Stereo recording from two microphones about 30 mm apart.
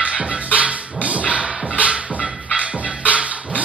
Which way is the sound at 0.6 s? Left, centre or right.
Right.